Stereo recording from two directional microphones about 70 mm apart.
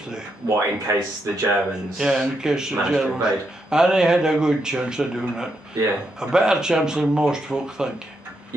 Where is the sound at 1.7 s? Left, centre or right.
Centre.